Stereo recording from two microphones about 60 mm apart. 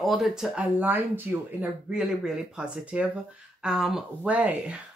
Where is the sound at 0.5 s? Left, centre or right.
Right.